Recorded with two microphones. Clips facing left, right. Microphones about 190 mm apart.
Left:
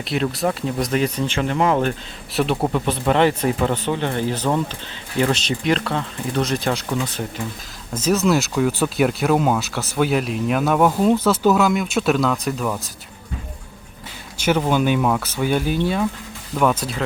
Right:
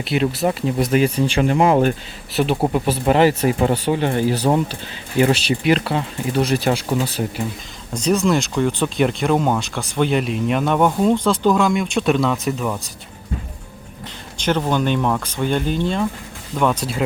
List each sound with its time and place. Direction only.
0.0 s speech: centre (ahead or behind)
2.3 s speech: centre (ahead or behind)
6.8 s speech: 25° right (ahead or behind)
7.9 s speech: 5° left (ahead or behind)
14.3 s speech: 10° left (ahead or behind)